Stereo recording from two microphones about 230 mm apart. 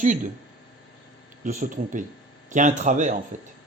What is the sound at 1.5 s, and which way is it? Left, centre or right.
Speech, right.